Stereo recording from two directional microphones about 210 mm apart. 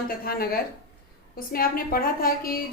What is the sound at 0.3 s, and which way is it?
A woman's voice, 45° left (ahead or behind).